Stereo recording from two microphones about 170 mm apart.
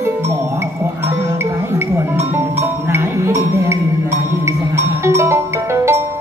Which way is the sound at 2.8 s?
15° right (ahead or behind).